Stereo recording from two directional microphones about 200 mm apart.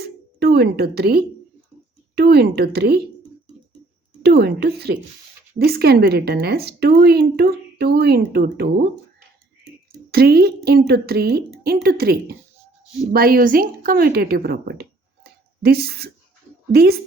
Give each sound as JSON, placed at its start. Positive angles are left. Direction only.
{"t": 0.0, "sound": "a woman's voice", "side_deg": -50}
{"t": 4.2, "sound": "a woman's voice", "side_deg": -55}
{"t": 10.1, "sound": "a woman's voice", "side_deg": -50}